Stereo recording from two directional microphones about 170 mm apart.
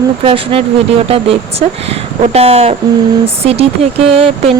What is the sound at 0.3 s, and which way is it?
Speech, 30° right (ahead or behind).